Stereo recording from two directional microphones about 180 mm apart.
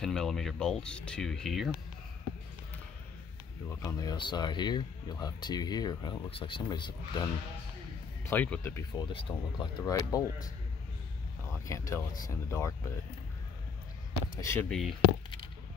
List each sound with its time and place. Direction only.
0.0 s speech: 5° left (ahead or behind)
3.6 s speech: 15° left (ahead or behind)
8.3 s speech: 10° left (ahead or behind)
8.9 s speech: 25° left (ahead or behind)
11.6 s speech: 15° left (ahead or behind)
14.3 s speech: 15° left (ahead or behind)